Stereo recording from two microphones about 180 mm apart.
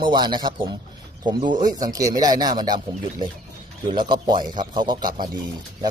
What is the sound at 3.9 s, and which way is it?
A man's voice, 25° right (ahead or behind).